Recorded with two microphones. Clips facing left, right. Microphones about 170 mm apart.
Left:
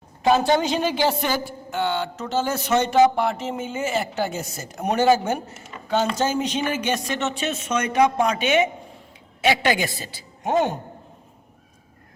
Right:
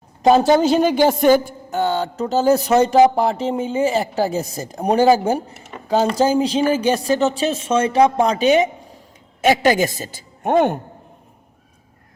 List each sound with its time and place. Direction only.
0.2 s a woman's voice: 40° right (ahead or behind); by 10.8 s 60° right (ahead or behind)